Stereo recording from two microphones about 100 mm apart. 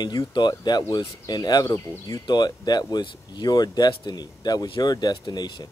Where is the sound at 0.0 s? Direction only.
45° left (ahead or behind).